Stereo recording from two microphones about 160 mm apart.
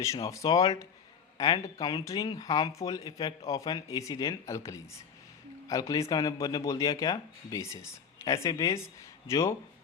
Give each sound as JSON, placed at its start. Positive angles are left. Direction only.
{"t": 0.0, "sound": "speech", "side_deg": 20}